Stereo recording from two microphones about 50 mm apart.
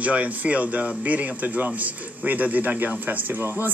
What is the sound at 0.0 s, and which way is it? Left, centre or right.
A woman's voice, right.